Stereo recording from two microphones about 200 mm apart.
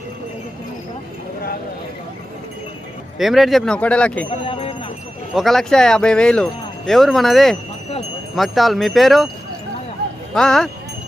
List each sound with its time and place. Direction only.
3.2 s speech: centre (ahead or behind)
4.3 s a sound: 25° left (ahead or behind)
5.3 s speech: centre (ahead or behind)
10.3 s speech: centre (ahead or behind)